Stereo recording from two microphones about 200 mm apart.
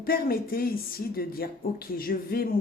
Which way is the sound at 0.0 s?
50° left (ahead or behind).